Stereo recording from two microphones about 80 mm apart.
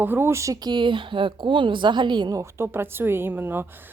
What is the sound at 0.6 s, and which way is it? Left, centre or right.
A woman's voice, right.